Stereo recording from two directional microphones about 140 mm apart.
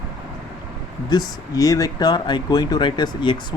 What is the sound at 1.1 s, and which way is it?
Speech, 25° left (ahead or behind).